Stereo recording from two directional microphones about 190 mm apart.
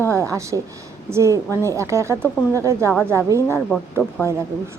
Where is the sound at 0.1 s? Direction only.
15° right (ahead or behind).